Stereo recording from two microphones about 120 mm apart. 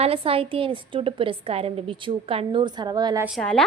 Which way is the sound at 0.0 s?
50° right (ahead or behind).